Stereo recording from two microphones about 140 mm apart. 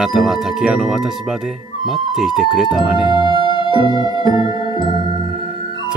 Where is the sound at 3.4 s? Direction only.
35° left (ahead or behind).